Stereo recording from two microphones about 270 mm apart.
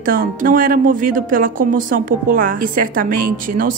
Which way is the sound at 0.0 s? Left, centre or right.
Right.